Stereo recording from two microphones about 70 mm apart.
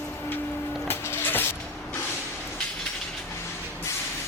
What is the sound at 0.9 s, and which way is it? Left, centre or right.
Music, left.